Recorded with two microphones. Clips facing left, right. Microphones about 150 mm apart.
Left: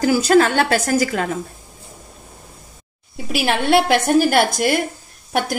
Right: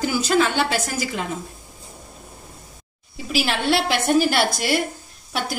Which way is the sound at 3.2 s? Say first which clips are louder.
Left 3 dB; 55° left (ahead or behind).